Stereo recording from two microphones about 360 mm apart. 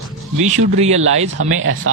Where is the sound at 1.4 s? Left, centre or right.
Right.